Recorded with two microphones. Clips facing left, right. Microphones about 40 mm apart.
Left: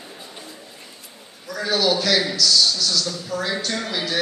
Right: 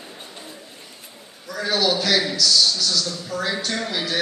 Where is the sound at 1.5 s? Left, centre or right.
Centre.